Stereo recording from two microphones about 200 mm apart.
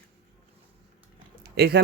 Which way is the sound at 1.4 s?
50° right (ahead or behind).